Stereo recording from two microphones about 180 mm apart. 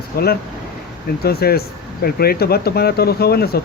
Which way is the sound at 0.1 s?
60° left (ahead or behind).